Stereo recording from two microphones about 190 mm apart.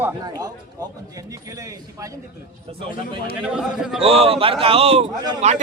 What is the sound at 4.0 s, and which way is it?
A man's voice, 30° right (ahead or behind).